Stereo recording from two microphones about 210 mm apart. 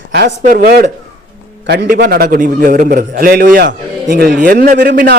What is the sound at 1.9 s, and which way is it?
A man's voice, 50° right (ahead or behind).